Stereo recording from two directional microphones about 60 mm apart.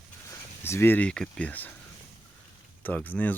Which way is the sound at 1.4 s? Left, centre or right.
Left.